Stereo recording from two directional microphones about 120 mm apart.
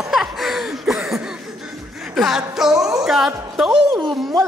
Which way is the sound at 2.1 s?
5° right (ahead or behind).